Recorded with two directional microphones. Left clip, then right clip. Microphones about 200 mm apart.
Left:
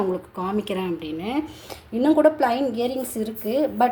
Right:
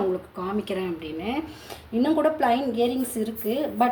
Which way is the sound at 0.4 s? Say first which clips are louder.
Left 3 dB; 30° left (ahead or behind).